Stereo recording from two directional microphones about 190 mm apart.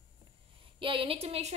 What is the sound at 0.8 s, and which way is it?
Speech, 30° right (ahead or behind).